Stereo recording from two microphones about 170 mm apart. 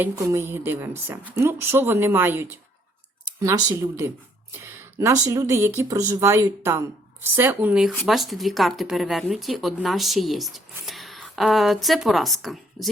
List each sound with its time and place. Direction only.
0.0 s speech: 15° right (ahead or behind); by 12.9 s centre (ahead or behind)